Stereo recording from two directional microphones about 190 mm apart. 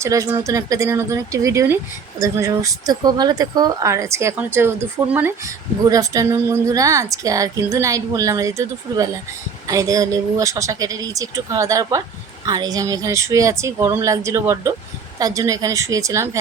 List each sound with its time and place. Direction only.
0.0 s speech: 15° right (ahead or behind)